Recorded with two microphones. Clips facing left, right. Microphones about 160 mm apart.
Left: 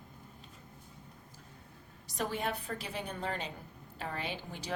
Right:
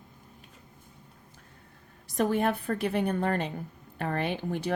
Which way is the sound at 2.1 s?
50° right (ahead or behind).